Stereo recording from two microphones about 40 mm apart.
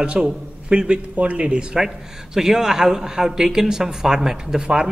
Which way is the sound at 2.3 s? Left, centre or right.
Centre.